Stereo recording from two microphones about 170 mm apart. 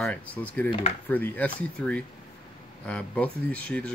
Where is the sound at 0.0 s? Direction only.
10° left (ahead or behind).